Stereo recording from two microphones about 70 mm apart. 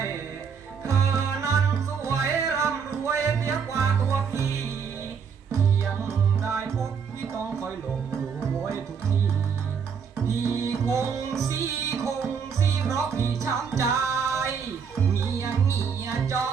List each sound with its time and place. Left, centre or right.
0.9 s music: right
6.4 s music: right
10.7 s music: right